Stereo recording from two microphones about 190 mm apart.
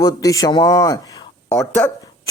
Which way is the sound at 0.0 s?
20° left (ahead or behind).